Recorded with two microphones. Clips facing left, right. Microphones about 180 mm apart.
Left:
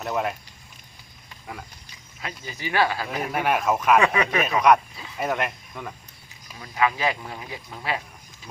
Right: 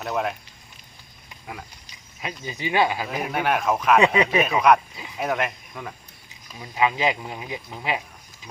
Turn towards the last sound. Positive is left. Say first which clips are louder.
# right 2 dB
turn(degrees=-20)  # may be behind; listen again after turning